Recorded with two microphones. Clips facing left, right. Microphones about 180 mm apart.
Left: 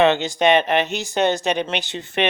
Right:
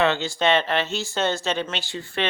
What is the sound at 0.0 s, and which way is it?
Speech, 20° left (ahead or behind).